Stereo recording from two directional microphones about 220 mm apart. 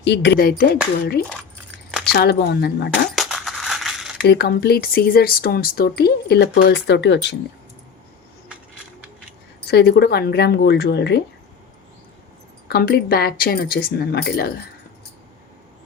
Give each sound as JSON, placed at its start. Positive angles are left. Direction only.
{"t": 0.0, "sound": "speech", "side_deg": 50}
{"t": 1.9, "sound": "a sound", "side_deg": -5}
{"t": 2.1, "sound": "speech", "side_deg": 50}
{"t": 3.1, "sound": "a sound", "side_deg": 0}
{"t": 4.2, "sound": "speech", "side_deg": 45}
{"t": 9.6, "sound": "speech", "side_deg": 45}
{"t": 12.6, "sound": "speech", "side_deg": 45}